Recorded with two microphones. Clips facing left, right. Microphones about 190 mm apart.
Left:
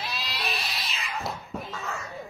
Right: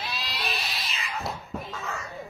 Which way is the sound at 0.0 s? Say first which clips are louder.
Even; centre (ahead or behind).